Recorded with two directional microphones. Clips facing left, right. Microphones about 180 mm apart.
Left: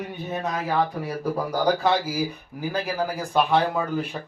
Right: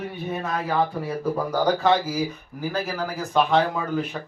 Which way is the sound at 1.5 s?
10° left (ahead or behind).